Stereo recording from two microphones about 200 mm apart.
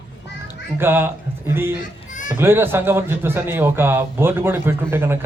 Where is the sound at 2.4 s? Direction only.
10° right (ahead or behind).